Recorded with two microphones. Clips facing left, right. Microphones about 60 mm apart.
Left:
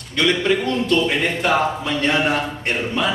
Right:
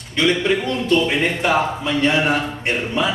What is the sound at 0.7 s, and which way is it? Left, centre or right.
Speech, right.